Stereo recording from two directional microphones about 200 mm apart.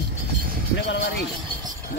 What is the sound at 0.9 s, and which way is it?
Speech, 60° left (ahead or behind).